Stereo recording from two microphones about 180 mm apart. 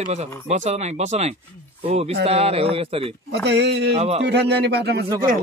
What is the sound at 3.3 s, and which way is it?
Speech, 70° right (ahead or behind).